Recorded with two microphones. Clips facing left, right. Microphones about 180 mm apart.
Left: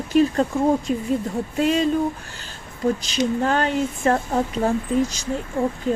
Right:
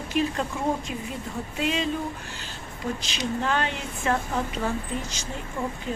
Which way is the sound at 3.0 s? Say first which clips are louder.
Left 7 dB; 40° left (ahead or behind).